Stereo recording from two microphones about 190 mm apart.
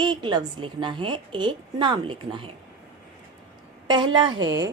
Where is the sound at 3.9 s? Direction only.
25° right (ahead or behind).